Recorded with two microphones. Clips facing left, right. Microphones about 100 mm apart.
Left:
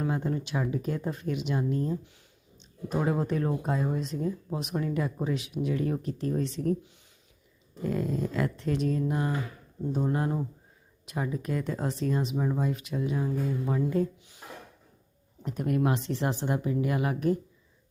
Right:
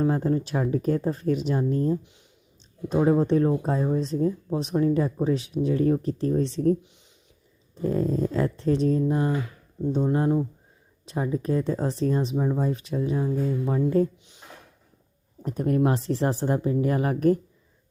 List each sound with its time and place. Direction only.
0.0 s speech: 35° right (ahead or behind)
7.8 s speech: 35° right (ahead or behind)
15.4 s speech: 35° right (ahead or behind)